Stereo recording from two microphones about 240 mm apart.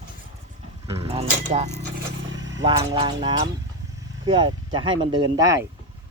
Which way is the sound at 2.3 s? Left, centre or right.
Right.